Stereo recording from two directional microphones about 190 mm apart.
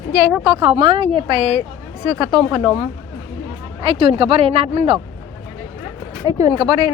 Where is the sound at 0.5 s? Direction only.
30° right (ahead or behind).